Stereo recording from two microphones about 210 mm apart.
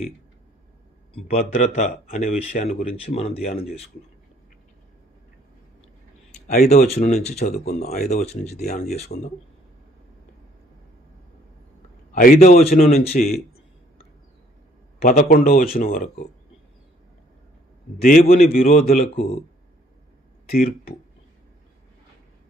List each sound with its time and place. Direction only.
1.1 s speech: 30° left (ahead or behind)
6.4 s speech: 40° left (ahead or behind)
7.6 s a man's voice: 45° left (ahead or behind)
8.3 s speech: 35° left (ahead or behind)
12.1 s speech: 40° left (ahead or behind)
15.0 s a man's voice: 35° left (ahead or behind)
18.0 s a man's voice: 45° left (ahead or behind)
20.4 s speech: 45° left (ahead or behind)